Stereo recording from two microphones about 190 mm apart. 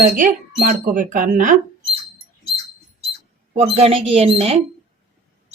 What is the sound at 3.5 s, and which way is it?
Speech, 30° right (ahead or behind).